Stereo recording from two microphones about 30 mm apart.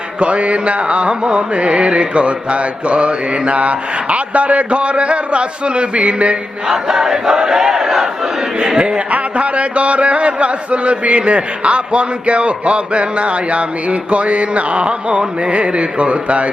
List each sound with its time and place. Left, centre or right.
0.2 s music: right
6.7 s battle cry: centre
8.8 s music: right
9.1 s a man's voice: right